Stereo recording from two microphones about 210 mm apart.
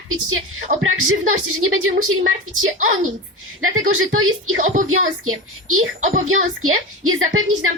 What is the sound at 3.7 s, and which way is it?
A woman's voice, 75° right (ahead or behind).